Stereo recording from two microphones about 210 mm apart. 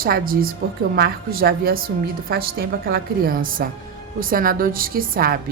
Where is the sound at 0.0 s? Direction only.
45° right (ahead or behind).